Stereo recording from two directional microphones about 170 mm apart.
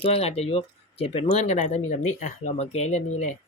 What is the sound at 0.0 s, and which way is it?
Speech, 35° left (ahead or behind).